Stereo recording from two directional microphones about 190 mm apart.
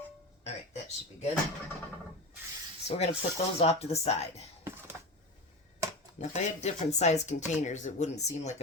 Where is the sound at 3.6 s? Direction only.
35° left (ahead or behind).